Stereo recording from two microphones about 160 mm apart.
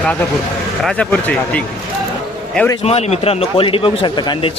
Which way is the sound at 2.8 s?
40° left (ahead or behind).